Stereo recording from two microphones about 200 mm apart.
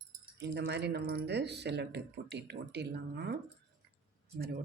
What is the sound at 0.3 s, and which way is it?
Speech, 60° right (ahead or behind).